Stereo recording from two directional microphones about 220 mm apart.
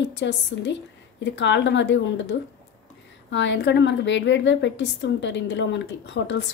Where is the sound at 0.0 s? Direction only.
50° left (ahead or behind).